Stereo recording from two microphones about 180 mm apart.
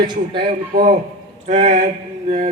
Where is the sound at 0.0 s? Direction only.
25° right (ahead or behind).